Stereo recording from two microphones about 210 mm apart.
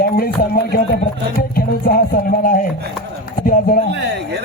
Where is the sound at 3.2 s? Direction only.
40° left (ahead or behind).